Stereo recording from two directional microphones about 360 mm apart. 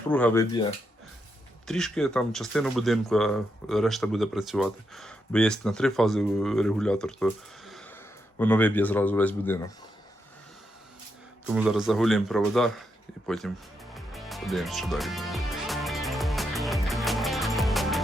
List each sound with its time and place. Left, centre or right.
0.1 s speech: centre
11.5 s speech: centre
13.9 s music: centre